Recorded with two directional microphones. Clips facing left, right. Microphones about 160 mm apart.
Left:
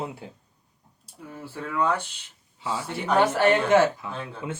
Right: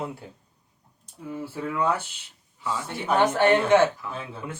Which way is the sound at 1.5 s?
10° right (ahead or behind).